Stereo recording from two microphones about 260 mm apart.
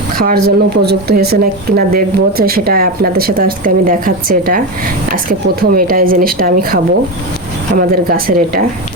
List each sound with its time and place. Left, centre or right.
0.2 s speech: right
7.8 s speech: right